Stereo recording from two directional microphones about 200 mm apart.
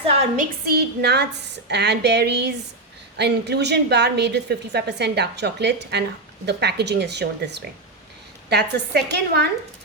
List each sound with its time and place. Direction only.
0.3 s a woman's voice: 50° right (ahead or behind)